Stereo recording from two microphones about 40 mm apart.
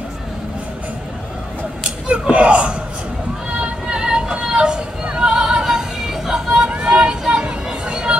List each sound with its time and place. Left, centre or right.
2.3 s speech: right
3.5 s music: right
6.7 s vehicle: right
7.8 s a sound: right